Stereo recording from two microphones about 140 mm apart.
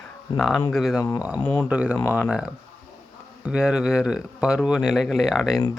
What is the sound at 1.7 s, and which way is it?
Speech, 10° right (ahead or behind).